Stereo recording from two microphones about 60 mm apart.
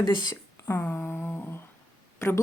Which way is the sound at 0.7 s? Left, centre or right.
Left.